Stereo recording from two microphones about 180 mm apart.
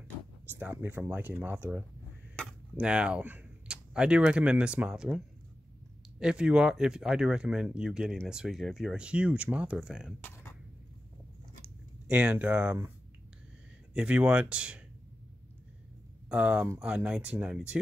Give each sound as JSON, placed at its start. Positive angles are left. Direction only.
{"t": 0.5, "sound": "speech", "side_deg": -10}
{"t": 10.2, "sound": "a sound", "side_deg": 10}
{"t": 12.1, "sound": "speech", "side_deg": -5}
{"t": 13.9, "sound": "speech", "side_deg": -5}
{"t": 16.3, "sound": "speech", "side_deg": -5}